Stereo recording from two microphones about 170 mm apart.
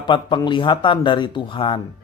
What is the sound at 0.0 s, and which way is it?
A man's voice, 30° left (ahead or behind).